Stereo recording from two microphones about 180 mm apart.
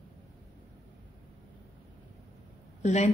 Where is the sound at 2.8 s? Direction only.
40° left (ahead or behind).